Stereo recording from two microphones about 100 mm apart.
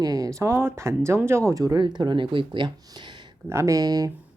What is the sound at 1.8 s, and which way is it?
Speech, 50° right (ahead or behind).